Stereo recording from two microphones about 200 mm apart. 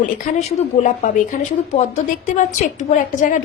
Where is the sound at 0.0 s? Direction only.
40° left (ahead or behind).